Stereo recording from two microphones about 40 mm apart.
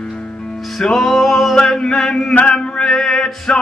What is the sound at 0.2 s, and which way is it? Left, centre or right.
Music, left.